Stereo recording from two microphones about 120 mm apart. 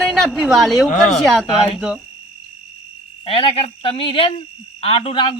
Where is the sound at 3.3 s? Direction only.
50° left (ahead or behind).